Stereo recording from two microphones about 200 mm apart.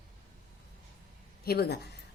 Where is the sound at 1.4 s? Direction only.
50° left (ahead or behind).